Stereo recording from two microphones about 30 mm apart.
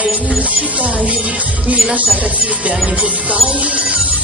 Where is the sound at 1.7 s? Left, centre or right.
Right.